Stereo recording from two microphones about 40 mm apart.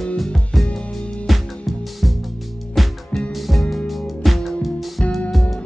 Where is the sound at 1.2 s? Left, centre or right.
Centre.